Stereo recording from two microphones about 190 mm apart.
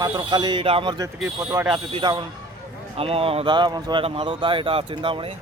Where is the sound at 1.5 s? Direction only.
10° right (ahead or behind).